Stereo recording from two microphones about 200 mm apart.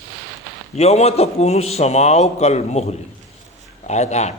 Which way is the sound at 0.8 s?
30° left (ahead or behind).